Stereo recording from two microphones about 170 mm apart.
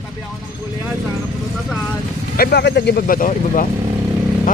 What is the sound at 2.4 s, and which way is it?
Speech, 75° left (ahead or behind).